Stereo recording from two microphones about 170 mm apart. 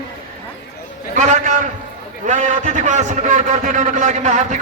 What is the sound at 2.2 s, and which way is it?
A man's voice, 45° right (ahead or behind).